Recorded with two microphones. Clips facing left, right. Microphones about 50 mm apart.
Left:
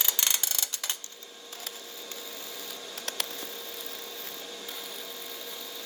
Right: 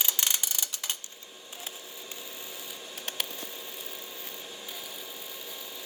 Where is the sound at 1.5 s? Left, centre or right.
Right.